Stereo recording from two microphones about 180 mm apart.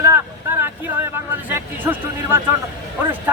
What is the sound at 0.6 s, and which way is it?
Speech, 15° right (ahead or behind).